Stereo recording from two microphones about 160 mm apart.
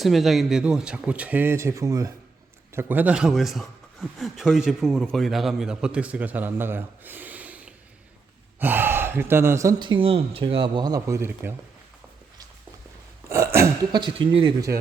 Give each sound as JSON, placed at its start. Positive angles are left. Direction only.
{"t": 0.0, "sound": "a man's voice", "side_deg": 0}
{"t": 13.2, "sound": "burping", "side_deg": -15}
{"t": 13.9, "sound": "speech", "side_deg": -30}